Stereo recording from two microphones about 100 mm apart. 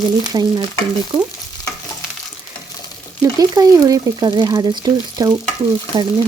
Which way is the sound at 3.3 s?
40° right (ahead or behind).